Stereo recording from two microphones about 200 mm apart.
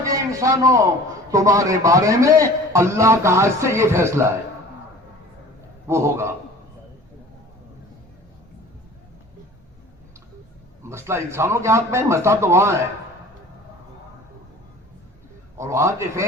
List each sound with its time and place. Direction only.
0.1 s a sound: 15° right (ahead or behind)
1.3 s a man's voice: 15° right (ahead or behind)
5.9 s a man's voice: 15° right (ahead or behind)
10.8 s a man's voice: 15° right (ahead or behind)
15.5 s a man's voice: 15° right (ahead or behind)